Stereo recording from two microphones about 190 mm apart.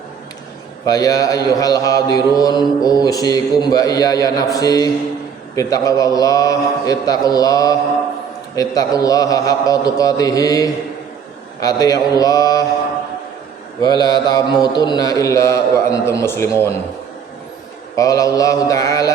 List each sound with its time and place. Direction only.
0.9 s speech: 20° left (ahead or behind)
13.8 s speech: 20° left (ahead or behind)
17.9 s speech: 15° left (ahead or behind)